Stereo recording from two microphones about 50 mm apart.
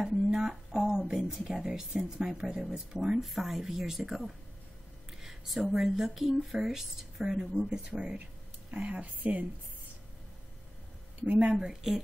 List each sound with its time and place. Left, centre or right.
0.0 s a sound: centre
1.3 s speech: centre
5.7 s speech: centre; by 9.5 s right
11.6 s speech: centre